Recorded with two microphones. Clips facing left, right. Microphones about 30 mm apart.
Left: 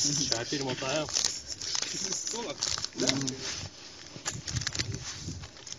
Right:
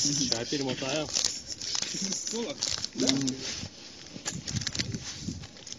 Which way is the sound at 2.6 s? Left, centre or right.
Right.